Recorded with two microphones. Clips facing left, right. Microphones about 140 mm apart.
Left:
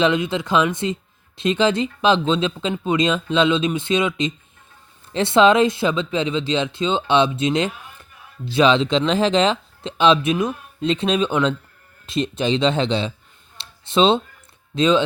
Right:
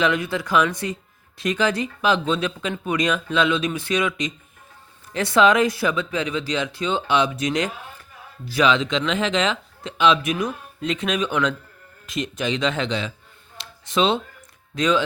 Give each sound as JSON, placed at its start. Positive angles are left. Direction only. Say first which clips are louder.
{"t": 0.0, "sound": "speech", "louder": "left 3 dB", "side_deg": 20}
{"t": 13.6, "sound": "a sound", "louder": "left 4 dB", "side_deg": 30}
{"t": 14.8, "sound": "speech", "louder": "left 4 dB", "side_deg": 25}